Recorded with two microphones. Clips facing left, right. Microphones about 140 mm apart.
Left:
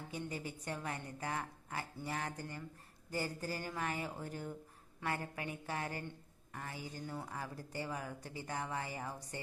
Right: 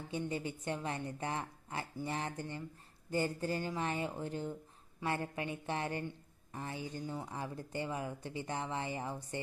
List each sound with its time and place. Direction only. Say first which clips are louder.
0.1 s speech: right 6 dB; 25° right (ahead or behind)